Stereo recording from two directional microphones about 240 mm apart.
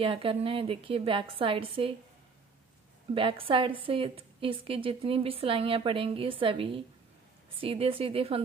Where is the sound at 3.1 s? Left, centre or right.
Right.